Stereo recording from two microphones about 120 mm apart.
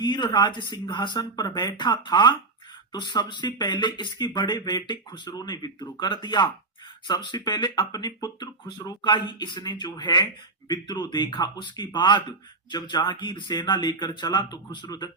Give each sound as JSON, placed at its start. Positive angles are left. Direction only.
{"t": 0.0, "sound": "speech", "side_deg": 35}